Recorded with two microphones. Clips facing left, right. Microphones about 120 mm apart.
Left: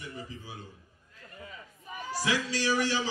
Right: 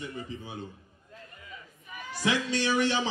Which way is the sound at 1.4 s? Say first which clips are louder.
Left 2 dB; 30° left (ahead or behind).